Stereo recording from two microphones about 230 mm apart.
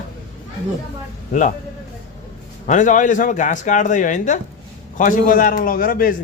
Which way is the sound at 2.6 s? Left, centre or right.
Left.